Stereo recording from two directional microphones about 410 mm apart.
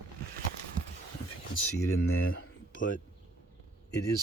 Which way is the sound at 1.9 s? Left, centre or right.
Left.